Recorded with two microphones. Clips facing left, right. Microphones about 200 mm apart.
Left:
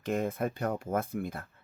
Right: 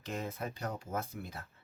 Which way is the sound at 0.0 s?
55° left (ahead or behind).